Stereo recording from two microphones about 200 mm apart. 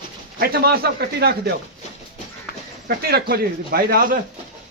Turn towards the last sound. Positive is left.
turn(degrees=-45)  # may be behind; listen again after turning